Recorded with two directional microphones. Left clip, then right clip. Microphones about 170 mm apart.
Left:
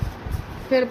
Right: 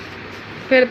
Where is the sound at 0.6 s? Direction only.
15° right (ahead or behind).